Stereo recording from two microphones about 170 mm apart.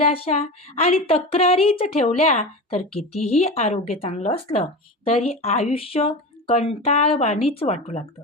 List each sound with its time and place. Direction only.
0.0 s a woman's voice: 40° left (ahead or behind)